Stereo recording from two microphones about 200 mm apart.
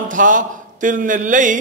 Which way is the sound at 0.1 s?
40° right (ahead or behind).